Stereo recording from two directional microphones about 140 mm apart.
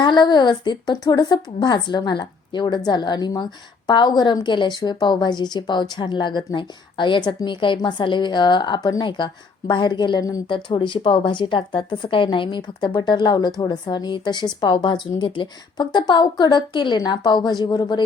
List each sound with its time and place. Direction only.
0.0 s a woman's voice: 30° left (ahead or behind)